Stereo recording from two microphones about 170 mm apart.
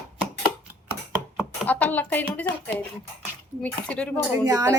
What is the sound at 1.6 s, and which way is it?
Speech, 10° left (ahead or behind).